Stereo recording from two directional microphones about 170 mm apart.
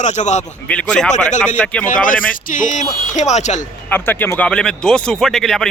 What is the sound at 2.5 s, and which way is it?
Speech, 50° left (ahead or behind).